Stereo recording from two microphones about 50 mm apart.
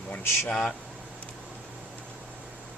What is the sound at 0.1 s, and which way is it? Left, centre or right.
Speech, left.